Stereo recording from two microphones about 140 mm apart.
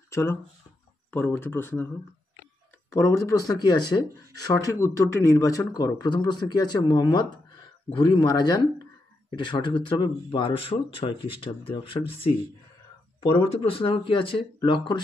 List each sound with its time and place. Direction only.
0.1 s speech: 20° left (ahead or behind)
2.9 s speech: 20° left (ahead or behind); by 12.4 s 40° left (ahead or behind)
13.6 s speech: 40° left (ahead or behind)